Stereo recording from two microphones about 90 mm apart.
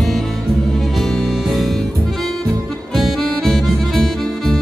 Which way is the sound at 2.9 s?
Centre (ahead or behind).